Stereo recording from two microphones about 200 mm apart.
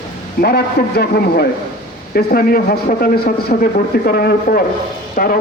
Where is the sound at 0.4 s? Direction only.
50° left (ahead or behind).